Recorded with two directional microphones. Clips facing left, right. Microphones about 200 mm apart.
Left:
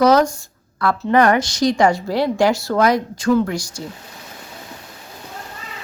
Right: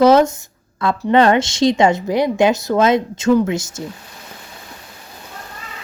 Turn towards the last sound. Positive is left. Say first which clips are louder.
# right 2 dB
turn(degrees=-20)  # may be behind; listen again after turning